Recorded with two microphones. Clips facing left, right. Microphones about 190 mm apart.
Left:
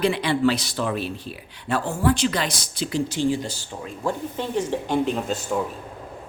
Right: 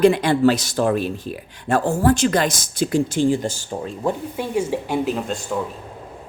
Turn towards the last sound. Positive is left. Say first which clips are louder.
# right 1 dB
turn(degrees=0)  # may be behind; listen again after turning